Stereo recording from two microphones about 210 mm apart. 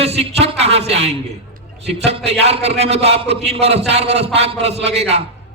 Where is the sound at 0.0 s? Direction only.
30° right (ahead or behind).